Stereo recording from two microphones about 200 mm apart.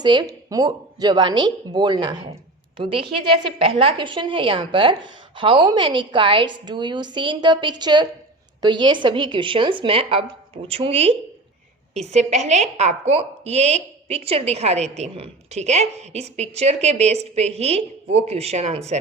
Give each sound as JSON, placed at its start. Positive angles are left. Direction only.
{"t": 0.0, "sound": "a woman's voice", "side_deg": -20}